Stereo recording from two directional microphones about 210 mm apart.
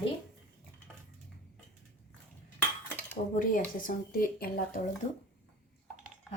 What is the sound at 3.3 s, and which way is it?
A woman's voice, 40° left (ahead or behind).